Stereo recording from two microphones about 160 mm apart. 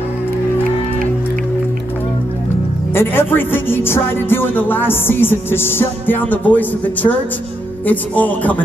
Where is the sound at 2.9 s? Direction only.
15° left (ahead or behind).